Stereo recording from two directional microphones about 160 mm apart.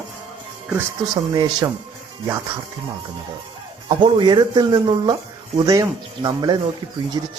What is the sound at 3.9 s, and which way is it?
Speech, 30° right (ahead or behind).